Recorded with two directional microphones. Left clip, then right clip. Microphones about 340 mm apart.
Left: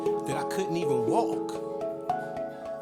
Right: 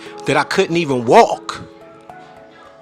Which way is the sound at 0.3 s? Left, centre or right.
Left.